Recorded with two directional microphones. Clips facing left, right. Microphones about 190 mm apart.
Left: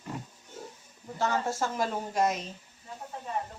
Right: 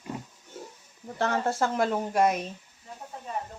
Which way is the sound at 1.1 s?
60° right (ahead or behind).